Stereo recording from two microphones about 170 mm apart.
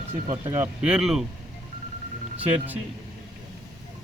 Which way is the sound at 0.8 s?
5° right (ahead or behind).